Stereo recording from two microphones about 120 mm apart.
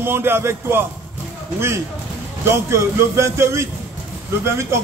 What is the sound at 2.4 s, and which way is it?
Speech, 20° right (ahead or behind).